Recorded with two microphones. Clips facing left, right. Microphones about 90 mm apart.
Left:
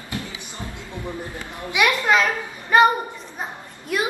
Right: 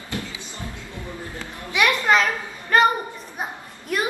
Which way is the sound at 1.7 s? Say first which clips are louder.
Even; 10° left (ahead or behind).